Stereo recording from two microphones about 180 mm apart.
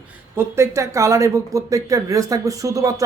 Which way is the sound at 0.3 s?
15° right (ahead or behind).